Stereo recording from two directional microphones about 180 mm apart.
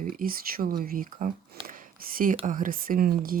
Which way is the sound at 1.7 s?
50° right (ahead or behind).